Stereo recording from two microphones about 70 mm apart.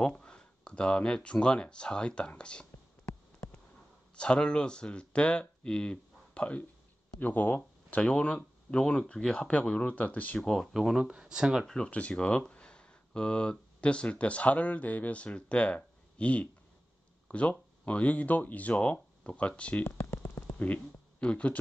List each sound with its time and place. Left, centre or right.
0.0 s speech: centre
4.1 s speech: centre
10.5 s speech: centre
11.6 s speech: centre
19.8 s a sound: left
20.5 s speech: left